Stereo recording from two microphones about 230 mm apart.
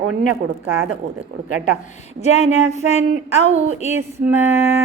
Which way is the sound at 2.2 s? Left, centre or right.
Left.